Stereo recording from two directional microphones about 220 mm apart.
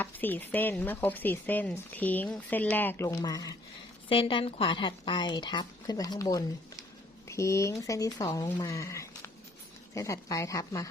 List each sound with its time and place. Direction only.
0.0 s speech: 10° left (ahead or behind)